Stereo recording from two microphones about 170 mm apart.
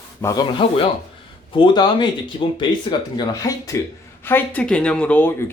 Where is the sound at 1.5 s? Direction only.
25° left (ahead or behind).